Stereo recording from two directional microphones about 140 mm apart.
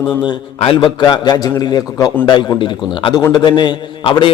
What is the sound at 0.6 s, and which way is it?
A man's voice, 40° left (ahead or behind).